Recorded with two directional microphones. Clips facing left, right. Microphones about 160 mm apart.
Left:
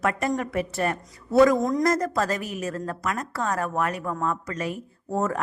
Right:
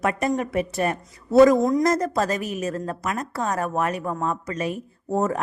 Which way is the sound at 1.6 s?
10° right (ahead or behind).